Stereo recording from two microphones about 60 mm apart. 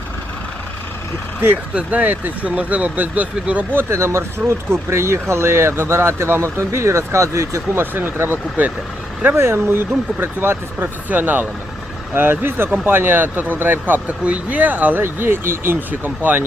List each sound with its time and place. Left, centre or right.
1.7 s speech: right
3.7 s speech: right
3.9 s speech: right
7.8 s speech: right
8.6 s speech: right
9.3 s speech: right
11.1 s speech: right
15.0 s speech: right